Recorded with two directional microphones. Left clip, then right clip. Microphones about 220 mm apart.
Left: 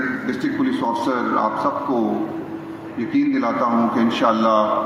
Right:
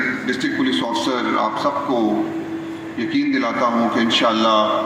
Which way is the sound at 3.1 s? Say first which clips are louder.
Even; 30° right (ahead or behind).